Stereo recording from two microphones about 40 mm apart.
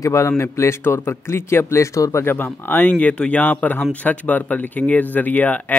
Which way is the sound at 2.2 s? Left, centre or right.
Left.